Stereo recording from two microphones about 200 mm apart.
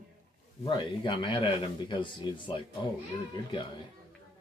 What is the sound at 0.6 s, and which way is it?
Speech, 25° left (ahead or behind).